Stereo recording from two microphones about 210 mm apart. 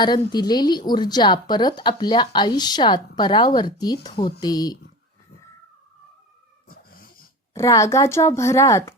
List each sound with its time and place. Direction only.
0.0 s a woman's voice: 20° left (ahead or behind)
6.7 s cat: 45° left (ahead or behind)
7.5 s speech: 15° left (ahead or behind)